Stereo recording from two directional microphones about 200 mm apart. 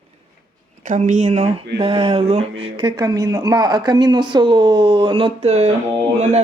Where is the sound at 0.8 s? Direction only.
40° right (ahead or behind).